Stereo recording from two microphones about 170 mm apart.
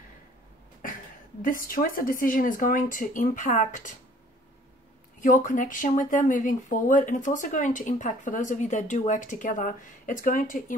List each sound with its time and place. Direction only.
1.4 s speech: 55° left (ahead or behind)
5.2 s speech: 50° left (ahead or behind)